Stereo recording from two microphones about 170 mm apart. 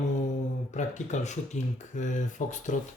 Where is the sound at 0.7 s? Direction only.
45° left (ahead or behind).